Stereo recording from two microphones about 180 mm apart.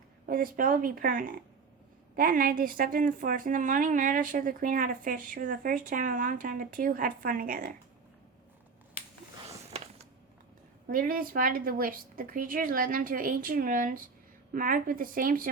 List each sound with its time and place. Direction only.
0.3 s a woman's voice: 50° right (ahead or behind)
9.6 s a sound: 35° right (ahead or behind)
10.8 s a woman's voice: 55° right (ahead or behind)